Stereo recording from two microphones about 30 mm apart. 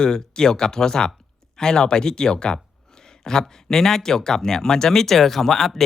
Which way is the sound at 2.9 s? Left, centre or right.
Centre.